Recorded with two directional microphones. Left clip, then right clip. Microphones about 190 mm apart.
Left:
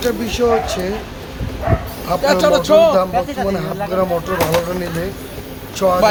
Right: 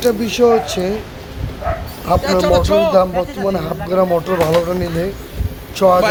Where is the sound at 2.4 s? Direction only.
15° left (ahead or behind).